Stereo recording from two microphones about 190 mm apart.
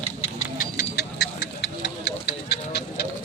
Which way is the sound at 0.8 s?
55° left (ahead or behind).